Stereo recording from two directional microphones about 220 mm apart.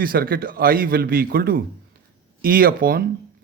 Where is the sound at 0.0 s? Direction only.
40° right (ahead or behind).